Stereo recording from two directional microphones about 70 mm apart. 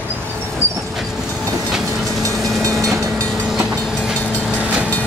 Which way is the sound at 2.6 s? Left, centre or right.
Right.